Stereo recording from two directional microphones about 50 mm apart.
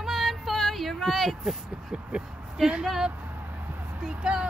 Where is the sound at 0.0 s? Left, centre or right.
Centre.